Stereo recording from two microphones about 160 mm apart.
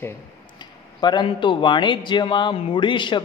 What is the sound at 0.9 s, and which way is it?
A man's voice, 25° left (ahead or behind).